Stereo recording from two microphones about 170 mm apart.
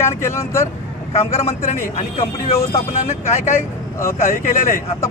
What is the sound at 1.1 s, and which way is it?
Speech, 40° left (ahead or behind).